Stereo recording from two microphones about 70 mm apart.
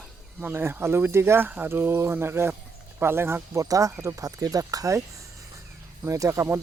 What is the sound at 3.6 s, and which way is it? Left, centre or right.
Speech, right.